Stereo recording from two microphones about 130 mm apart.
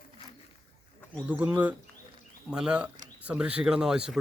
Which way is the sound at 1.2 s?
10° right (ahead or behind).